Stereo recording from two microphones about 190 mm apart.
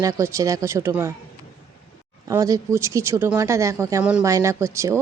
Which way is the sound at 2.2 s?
15° right (ahead or behind).